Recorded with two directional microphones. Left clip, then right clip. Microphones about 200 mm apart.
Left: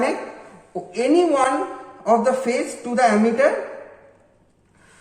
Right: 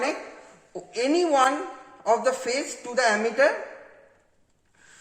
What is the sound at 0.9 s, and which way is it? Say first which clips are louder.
Speech: left 5 dB; 45° right (ahead or behind).